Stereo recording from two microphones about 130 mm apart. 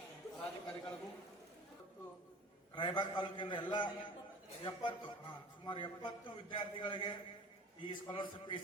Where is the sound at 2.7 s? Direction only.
40° left (ahead or behind).